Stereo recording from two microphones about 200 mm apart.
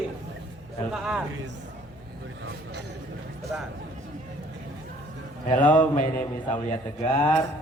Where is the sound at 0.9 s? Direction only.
5° right (ahead or behind).